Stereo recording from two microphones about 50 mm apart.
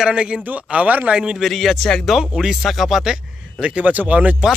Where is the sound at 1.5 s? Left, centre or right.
Centre.